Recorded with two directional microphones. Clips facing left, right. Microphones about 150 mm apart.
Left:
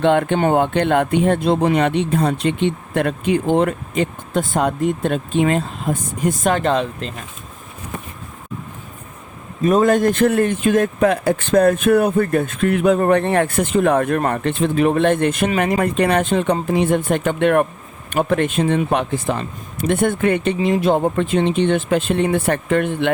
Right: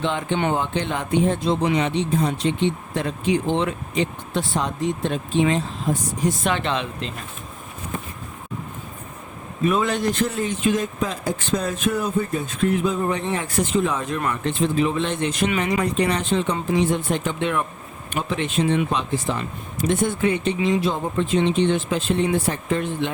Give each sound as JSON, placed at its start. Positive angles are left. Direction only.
{"t": 0.0, "sound": "speech", "side_deg": 60}
{"t": 9.6, "sound": "speech", "side_deg": 45}